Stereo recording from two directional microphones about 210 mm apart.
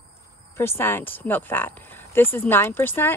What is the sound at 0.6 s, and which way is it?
Speech, 10° left (ahead or behind).